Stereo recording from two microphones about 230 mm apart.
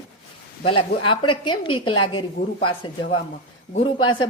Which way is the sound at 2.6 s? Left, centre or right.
Left.